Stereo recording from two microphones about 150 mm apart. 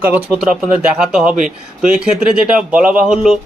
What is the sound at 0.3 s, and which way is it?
Speech, 10° right (ahead or behind).